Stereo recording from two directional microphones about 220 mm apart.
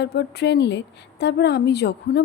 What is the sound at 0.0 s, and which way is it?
A woman's voice, 50° left (ahead or behind).